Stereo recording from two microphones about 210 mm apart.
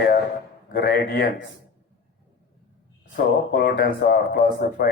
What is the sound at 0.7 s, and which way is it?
Mantra, 50° left (ahead or behind).